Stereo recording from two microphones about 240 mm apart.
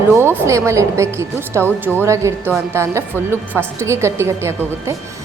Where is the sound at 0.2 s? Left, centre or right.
Centre.